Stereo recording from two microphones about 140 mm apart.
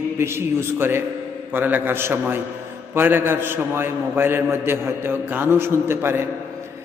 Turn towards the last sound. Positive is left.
turn(degrees=-15)  # may be behind; listen again after turning